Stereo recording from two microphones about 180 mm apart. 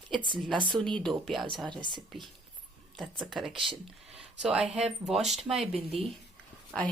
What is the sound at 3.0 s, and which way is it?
Speech, centre (ahead or behind).